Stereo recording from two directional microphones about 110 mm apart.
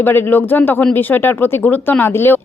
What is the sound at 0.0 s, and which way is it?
A woman's voice, 20° left (ahead or behind).